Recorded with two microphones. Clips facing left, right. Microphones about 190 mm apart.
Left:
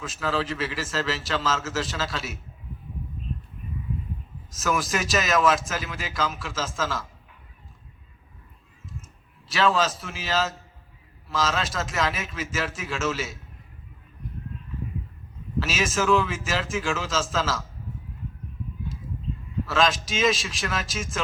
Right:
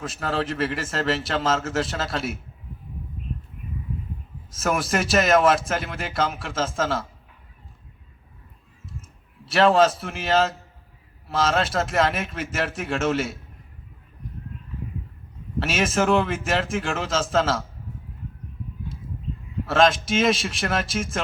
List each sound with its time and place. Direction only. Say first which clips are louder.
0.1 s a man's voice: left 1 dB; 60° right (ahead or behind)
4.6 s a man's voice: right 2 dB; 60° right (ahead or behind)
9.5 s a man's voice: right 6 dB; 60° right (ahead or behind)
15.5 s a man's voice: right 3 dB; 60° right (ahead or behind)
19.6 s a man's voice: right 5 dB; 55° right (ahead or behind)